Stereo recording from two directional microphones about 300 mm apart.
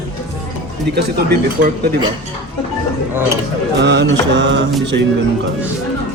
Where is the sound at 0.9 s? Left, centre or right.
Right.